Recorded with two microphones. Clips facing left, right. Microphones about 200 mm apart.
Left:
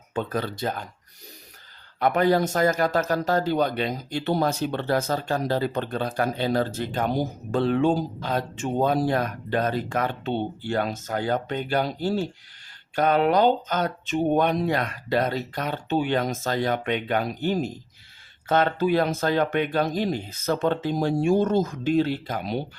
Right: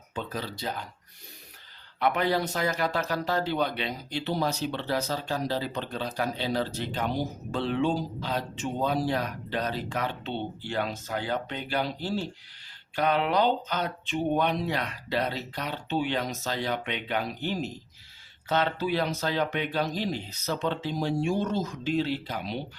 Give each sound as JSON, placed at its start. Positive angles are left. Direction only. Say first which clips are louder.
{"t": 0.1, "sound": "a man's voice", "louder": "left 7 dB", "side_deg": 55}
{"t": 2.0, "sound": "a man's voice", "louder": "left 5 dB", "side_deg": 45}